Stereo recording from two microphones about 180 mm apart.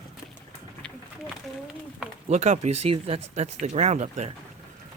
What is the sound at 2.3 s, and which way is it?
Speech, 40° right (ahead or behind).